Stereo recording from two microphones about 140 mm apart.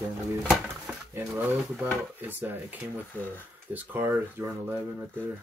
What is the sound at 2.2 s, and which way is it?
Speech, 15° right (ahead or behind).